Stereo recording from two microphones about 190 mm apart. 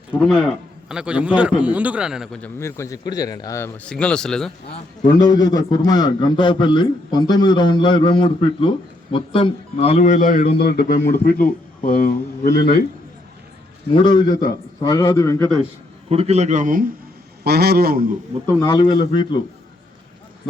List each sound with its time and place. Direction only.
0.2 s a man's voice: centre (ahead or behind)
2.6 s a man's voice: 15° left (ahead or behind)
5.3 s a man's voice: 20° left (ahead or behind); by 12.8 s 55° left (ahead or behind)
13.9 s a man's voice: 25° left (ahead or behind)
16.0 s a man's voice: 30° right (ahead or behind)
17.4 s a man's voice: 55° right (ahead or behind)
18.6 s a man's voice: 20° left (ahead or behind)